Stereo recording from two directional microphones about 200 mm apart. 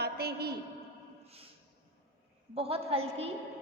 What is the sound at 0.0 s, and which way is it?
Speech, 50° right (ahead or behind).